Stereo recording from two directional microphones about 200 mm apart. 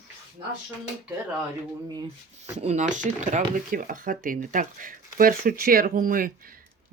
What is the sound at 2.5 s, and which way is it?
Speech, 35° right (ahead or behind).